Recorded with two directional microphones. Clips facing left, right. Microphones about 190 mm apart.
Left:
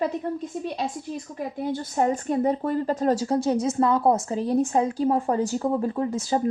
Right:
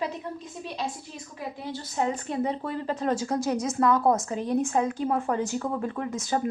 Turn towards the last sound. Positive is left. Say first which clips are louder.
# left 4 dB
turn(degrees=30)  # may be behind; listen again after turning